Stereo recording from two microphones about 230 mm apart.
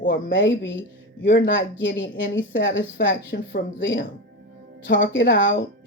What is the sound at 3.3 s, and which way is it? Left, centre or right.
Speech, left.